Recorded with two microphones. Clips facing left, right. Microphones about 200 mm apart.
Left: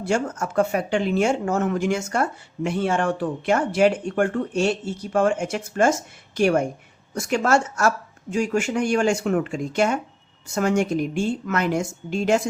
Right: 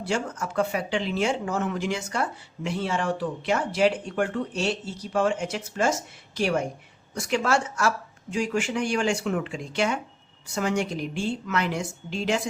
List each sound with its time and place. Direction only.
0.1 s speech: 45° left (ahead or behind)